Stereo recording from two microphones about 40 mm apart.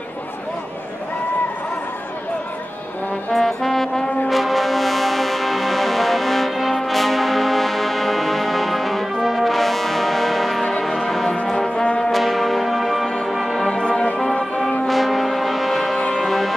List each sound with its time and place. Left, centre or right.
3.3 s brass instrument: centre
4.3 s music: centre
12.0 s music: centre
13.7 s music: left
14.9 s music: centre